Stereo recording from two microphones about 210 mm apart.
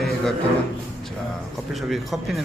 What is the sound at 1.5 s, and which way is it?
Speech, centre (ahead or behind).